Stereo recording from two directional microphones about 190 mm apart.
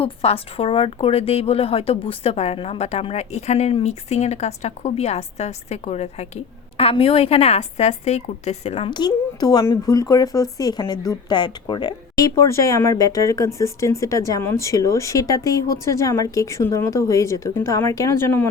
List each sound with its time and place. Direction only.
0.0 s a woman's voice: 30° left (ahead or behind); by 18.4 s 15° left (ahead or behind)